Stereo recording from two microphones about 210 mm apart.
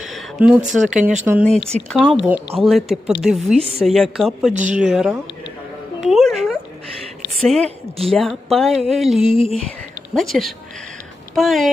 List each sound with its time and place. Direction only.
0.0 s speech: centre (ahead or behind)
1.5 s speech: 5° left (ahead or behind)
3.6 s a woman's voice: 30° right (ahead or behind)
3.8 s speech: centre (ahead or behind)
6.0 s a sound: centre (ahead or behind)
7.4 s speech: centre (ahead or behind)
9.3 s speech: 25° left (ahead or behind)
10.2 s speech: centre (ahead or behind)